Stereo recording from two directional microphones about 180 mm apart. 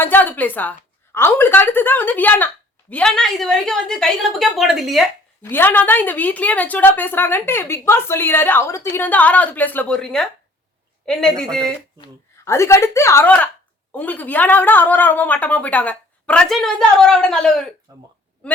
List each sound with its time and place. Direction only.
0.0 s a woman's voice: 10° left (ahead or behind)
5.4 s a woman's voice: 10° left (ahead or behind)
12.5 s a woman's voice: 15° left (ahead or behind)
17.9 s speech: 20° right (ahead or behind)